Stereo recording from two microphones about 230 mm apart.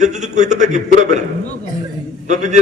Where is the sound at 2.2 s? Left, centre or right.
Right.